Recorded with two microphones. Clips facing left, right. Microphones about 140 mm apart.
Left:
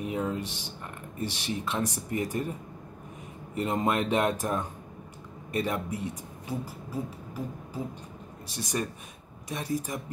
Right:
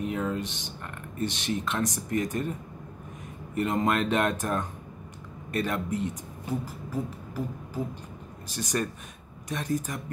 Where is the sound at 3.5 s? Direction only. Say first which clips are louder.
Right 1 dB; 15° left (ahead or behind).